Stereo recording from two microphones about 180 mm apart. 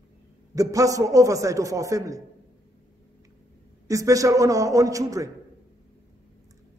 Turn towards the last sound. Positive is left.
turn(degrees=-20)  # may be behind; listen again after turning